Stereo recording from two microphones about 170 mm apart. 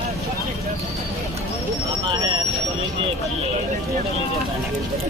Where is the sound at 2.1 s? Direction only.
25° right (ahead or behind).